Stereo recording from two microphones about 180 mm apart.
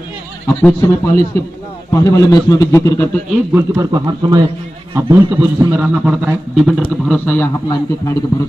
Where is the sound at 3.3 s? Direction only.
15° right (ahead or behind); by 7.5 s 10° left (ahead or behind).